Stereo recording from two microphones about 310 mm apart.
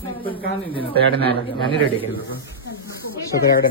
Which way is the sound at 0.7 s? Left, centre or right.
Centre.